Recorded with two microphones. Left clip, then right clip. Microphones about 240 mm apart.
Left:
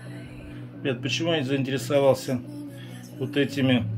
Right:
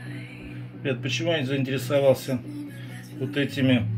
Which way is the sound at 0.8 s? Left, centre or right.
Centre.